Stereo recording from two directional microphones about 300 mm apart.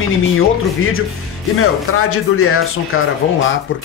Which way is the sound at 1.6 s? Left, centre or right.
Left.